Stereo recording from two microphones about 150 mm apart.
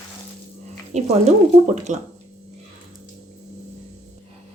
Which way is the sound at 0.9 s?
50° right (ahead or behind).